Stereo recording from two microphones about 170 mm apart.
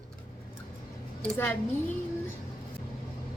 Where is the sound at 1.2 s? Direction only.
10° left (ahead or behind).